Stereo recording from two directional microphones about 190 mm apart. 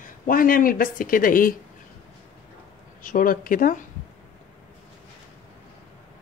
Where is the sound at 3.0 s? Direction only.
45° left (ahead or behind).